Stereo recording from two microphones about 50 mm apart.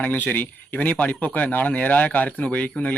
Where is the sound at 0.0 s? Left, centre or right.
Left.